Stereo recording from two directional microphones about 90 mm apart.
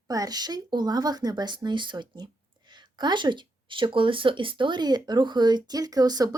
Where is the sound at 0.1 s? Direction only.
45° right (ahead or behind).